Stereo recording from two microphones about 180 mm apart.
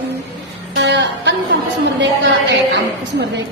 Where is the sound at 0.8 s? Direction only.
80° right.